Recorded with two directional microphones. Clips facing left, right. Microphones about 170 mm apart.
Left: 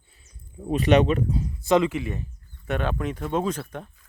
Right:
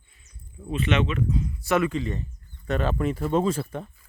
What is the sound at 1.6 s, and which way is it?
Speech, 15° left (ahead or behind).